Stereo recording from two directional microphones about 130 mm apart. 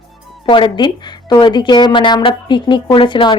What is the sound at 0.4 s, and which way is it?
Speech, 40° left (ahead or behind).